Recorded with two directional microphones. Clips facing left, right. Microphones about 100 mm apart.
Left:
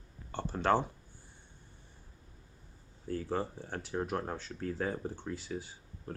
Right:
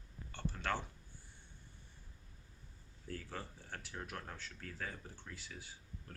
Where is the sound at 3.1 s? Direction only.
30° left (ahead or behind).